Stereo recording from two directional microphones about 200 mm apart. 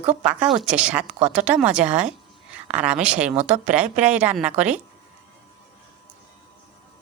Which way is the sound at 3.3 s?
35° right (ahead or behind).